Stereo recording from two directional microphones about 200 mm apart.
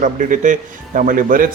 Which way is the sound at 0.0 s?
40° right (ahead or behind).